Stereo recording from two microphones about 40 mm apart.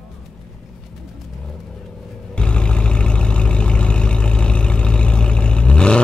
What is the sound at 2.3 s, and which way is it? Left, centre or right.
Vehicle, left.